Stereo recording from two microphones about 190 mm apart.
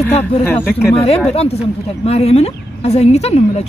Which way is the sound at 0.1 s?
10° left (ahead or behind).